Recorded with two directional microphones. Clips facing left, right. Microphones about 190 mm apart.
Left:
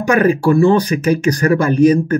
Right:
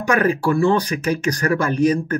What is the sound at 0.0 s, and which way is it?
Speech, 10° left (ahead or behind).